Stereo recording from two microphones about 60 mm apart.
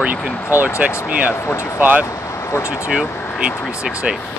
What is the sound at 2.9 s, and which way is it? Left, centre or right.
Speech, centre.